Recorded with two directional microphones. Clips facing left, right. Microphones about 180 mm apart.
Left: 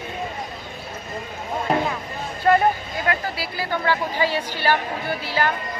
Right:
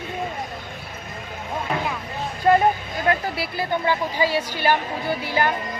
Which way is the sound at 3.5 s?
15° right (ahead or behind).